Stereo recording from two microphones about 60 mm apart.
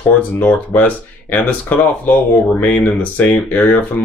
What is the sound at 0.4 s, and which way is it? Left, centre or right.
Speech, left.